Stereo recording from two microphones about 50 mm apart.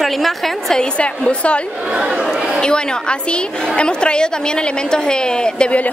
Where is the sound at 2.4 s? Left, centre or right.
Centre.